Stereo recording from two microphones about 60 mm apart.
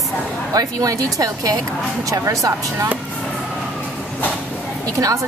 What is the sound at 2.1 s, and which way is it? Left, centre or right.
Speech, right.